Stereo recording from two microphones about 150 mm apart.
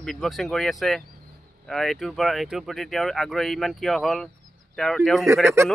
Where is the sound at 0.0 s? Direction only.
Centre (ahead or behind).